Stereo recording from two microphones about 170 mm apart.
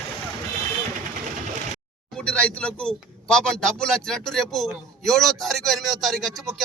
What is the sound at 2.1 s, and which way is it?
A man's voice, 5° left (ahead or behind).